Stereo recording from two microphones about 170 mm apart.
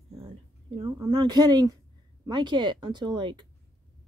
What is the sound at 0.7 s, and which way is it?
Speech, 25° right (ahead or behind).